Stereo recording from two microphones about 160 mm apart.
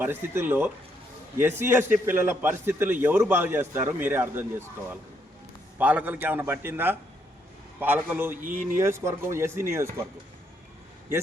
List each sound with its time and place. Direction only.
0.0 s a man's voice: 15° right (ahead or behind)
5.8 s a man's voice: 10° right (ahead or behind)
8.4 s speech: 55° right (ahead or behind)
8.8 s a man's voice: 15° right (ahead or behind)